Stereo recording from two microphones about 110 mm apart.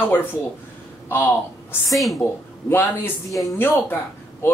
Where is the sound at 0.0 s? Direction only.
20° left (ahead or behind).